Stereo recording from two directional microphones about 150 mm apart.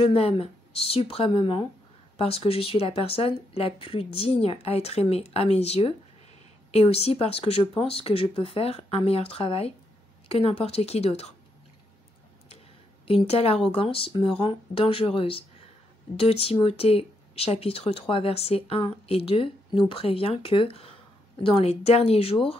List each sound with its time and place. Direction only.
0.0 s a woman's voice: 40° left (ahead or behind)
13.0 s speech: 40° left (ahead or behind)